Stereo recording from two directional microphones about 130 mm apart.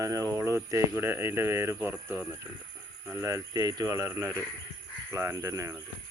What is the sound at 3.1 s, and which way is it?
Speech, 25° right (ahead or behind).